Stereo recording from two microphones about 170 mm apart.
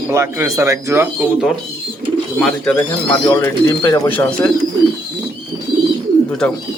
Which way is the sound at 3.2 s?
15° left (ahead or behind).